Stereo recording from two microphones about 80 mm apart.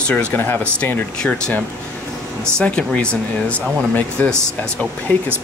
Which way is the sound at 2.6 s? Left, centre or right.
Centre.